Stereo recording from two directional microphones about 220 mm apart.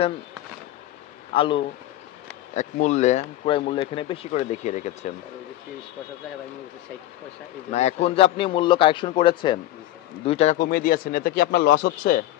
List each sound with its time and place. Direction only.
1.3 s speech: 25° left (ahead or behind)
2.5 s speech: 35° left (ahead or behind)
7.7 s a man's voice: 30° left (ahead or behind)